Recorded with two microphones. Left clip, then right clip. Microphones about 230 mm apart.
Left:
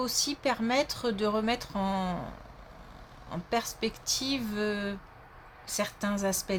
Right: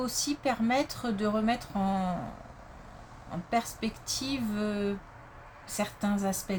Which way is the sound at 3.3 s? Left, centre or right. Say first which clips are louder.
Right 1 dB; left.